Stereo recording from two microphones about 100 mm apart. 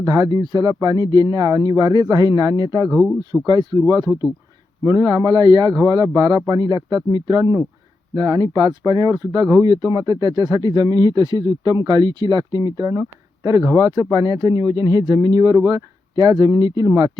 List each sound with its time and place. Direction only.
0.0 s speech: 45° right (ahead or behind)
2.9 s speech: 10° left (ahead or behind)
3.4 s speech: 45° right (ahead or behind)
4.8 s speech: 35° right (ahead or behind)
12.9 s speech: 30° right (ahead or behind)